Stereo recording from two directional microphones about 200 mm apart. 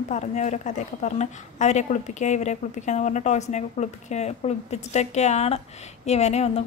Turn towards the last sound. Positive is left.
turn(degrees=30)  # may be behind; listen again after turning